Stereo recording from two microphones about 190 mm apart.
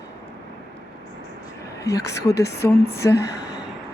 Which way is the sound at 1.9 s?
20° left (ahead or behind).